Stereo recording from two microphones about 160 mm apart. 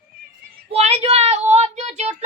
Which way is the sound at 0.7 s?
40° right (ahead or behind).